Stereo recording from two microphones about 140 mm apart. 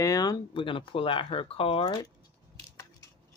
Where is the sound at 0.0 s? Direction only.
25° left (ahead or behind).